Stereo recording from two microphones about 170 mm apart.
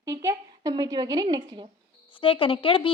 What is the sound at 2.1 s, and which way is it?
Speech, 30° left (ahead or behind).